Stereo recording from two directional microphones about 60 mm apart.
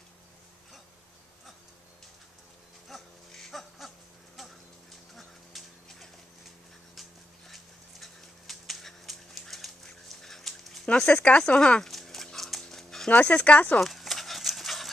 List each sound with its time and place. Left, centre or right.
2.9 s goat: centre
3.8 s a sound: centre
5.1 s duck: centre
7.0 s a sound: centre
11.1 s speech: left
11.8 s dog: centre
13.1 s speech: left
13.7 s dog: centre